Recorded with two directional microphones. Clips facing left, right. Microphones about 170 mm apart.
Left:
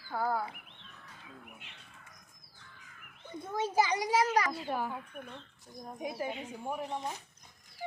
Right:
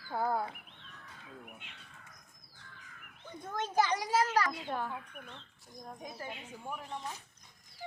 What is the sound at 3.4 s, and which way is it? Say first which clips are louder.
A child's voice: left 2 dB; 10° left (ahead or behind).